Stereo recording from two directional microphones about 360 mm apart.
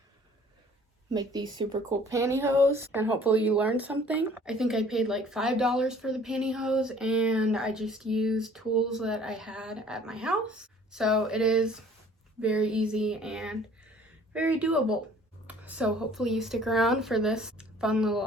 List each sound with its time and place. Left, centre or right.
1.1 s speech: centre